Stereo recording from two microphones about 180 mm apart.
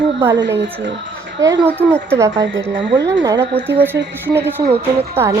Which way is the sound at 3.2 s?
25° right (ahead or behind).